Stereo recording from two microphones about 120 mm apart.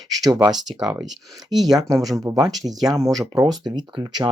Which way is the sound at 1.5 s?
35° right (ahead or behind).